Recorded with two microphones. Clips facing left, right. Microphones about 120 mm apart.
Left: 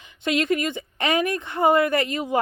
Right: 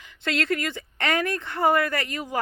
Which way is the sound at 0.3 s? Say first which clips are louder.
Left 4 dB; 15° left (ahead or behind).